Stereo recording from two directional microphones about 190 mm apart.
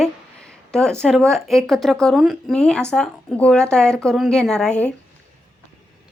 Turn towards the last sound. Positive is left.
turn(degrees=5)  # may be behind; listen again after turning